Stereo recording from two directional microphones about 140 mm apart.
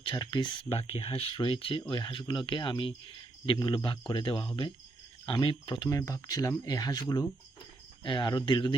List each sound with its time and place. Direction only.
0.0 s speech: 35° left (ahead or behind)
5.9 s speech: 25° left (ahead or behind)